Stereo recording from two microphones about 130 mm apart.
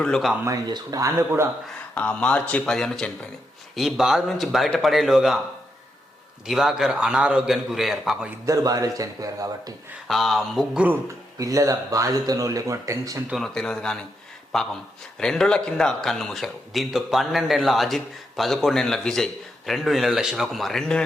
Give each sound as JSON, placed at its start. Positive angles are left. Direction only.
{"t": 0.0, "sound": "speech", "side_deg": 5}
{"t": 0.4, "sound": "speech", "side_deg": -30}
{"t": 2.0, "sound": "speech", "side_deg": 10}
{"t": 6.5, "sound": "speech", "side_deg": -5}
{"t": 8.4, "sound": "speech", "side_deg": -25}
{"t": 10.1, "sound": "speech", "side_deg": 0}
{"t": 11.3, "sound": "speech", "side_deg": -25}
{"t": 13.3, "sound": "speech", "side_deg": 5}